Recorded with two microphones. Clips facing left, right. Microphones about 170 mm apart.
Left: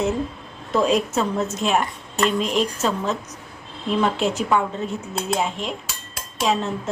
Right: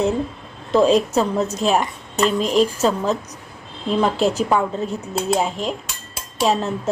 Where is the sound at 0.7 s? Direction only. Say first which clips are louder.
Right 4 dB; 30° right (ahead or behind).